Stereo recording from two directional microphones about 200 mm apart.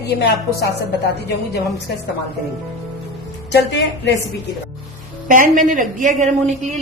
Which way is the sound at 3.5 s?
60° left (ahead or behind).